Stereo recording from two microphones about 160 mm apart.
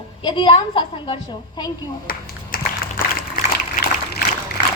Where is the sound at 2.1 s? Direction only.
65° left (ahead or behind).